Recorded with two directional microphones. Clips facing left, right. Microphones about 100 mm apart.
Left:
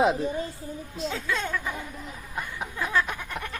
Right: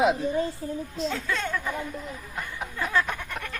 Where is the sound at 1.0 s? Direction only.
5° left (ahead or behind).